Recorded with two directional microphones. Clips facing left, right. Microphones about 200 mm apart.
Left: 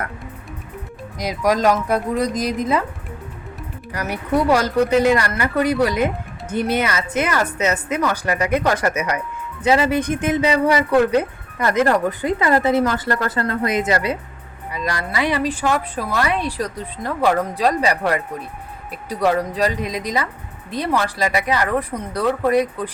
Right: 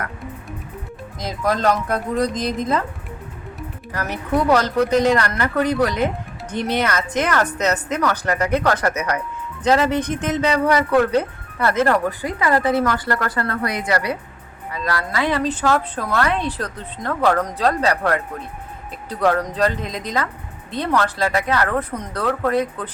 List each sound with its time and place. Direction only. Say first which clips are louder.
1.2 s a woman's voice: left 3 dB; 15° left (ahead or behind)
3.9 s a woman's voice: left 1 dB; 10° left (ahead or behind)